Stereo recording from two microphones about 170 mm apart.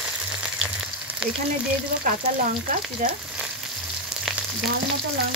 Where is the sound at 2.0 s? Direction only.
55° right (ahead or behind).